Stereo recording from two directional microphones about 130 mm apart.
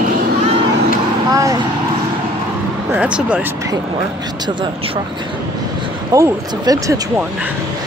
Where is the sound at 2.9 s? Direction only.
10° right (ahead or behind).